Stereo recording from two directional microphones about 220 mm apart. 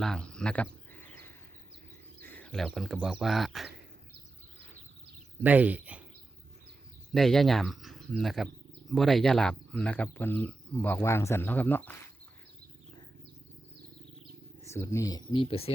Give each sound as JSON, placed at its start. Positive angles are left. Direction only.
{"t": 0.0, "sound": "a sound", "side_deg": 5}
{"t": 2.2, "sound": "speech", "side_deg": 5}
{"t": 5.4, "sound": "speech", "side_deg": -5}
{"t": 7.1, "sound": "speech", "side_deg": 0}
{"t": 14.6, "sound": "speech", "side_deg": 15}